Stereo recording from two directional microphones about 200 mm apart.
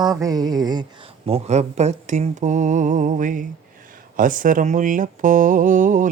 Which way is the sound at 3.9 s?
40° right (ahead or behind).